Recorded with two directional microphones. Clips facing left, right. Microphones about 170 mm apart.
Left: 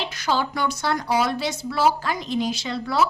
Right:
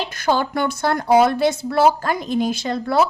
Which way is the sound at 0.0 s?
50° right (ahead or behind).